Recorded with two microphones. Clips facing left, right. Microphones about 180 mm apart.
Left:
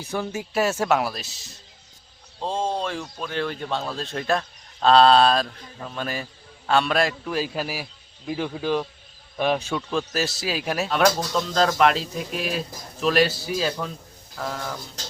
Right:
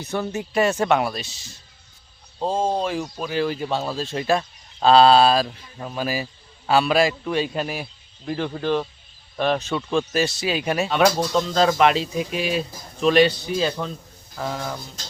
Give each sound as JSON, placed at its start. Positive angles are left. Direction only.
{"t": 0.3, "sound": "speech", "side_deg": 5}
{"t": 10.0, "sound": "speech", "side_deg": 0}